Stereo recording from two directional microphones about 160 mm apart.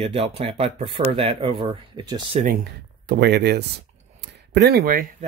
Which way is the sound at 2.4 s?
75° right (ahead or behind).